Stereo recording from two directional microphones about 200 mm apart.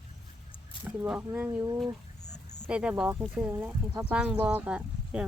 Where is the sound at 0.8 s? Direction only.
10° right (ahead or behind).